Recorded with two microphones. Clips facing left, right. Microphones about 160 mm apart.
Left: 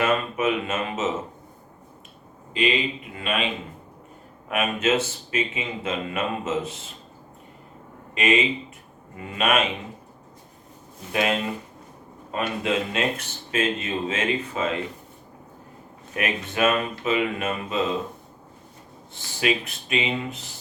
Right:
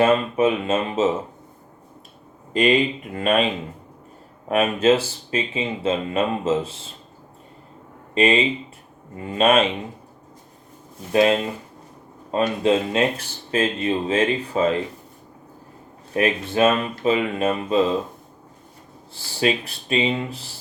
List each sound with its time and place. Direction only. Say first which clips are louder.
0.0 s speech: right 5 dB; 30° right (ahead or behind)
2.5 s speech: right 6 dB; 45° right (ahead or behind); by 6.9 s 30° right (ahead or behind)
8.1 s speech: right 4 dB; 30° right (ahead or behind)
11.1 s speech: right 6 dB; 30° right (ahead or behind)
16.1 s speech: right 6 dB; 30° right (ahead or behind)
19.4 s speech: right 3 dB; 30° right (ahead or behind)